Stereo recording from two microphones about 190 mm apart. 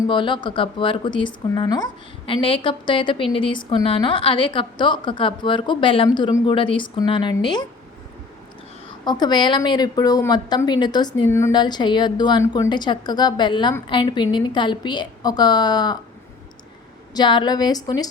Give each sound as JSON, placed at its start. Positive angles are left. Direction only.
{"t": 0.0, "sound": "a woman's voice", "side_deg": 25}
{"t": 9.0, "sound": "a woman's voice", "side_deg": 25}
{"t": 17.2, "sound": "a woman's voice", "side_deg": 25}